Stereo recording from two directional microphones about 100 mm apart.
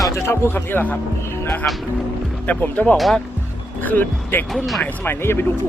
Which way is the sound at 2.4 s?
15° left (ahead or behind).